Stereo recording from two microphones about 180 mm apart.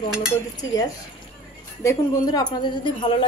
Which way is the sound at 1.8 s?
20° left (ahead or behind).